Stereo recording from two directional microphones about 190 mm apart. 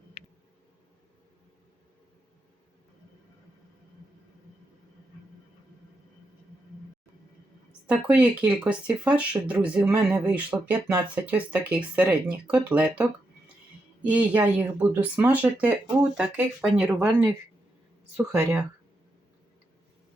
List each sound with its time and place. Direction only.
7.7 s speech: 5° right (ahead or behind)